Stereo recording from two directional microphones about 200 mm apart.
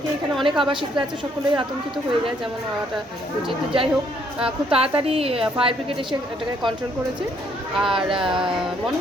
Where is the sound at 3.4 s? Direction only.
25° right (ahead or behind).